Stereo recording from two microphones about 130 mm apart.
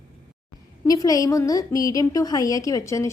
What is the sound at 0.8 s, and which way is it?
A woman's voice, 25° left (ahead or behind).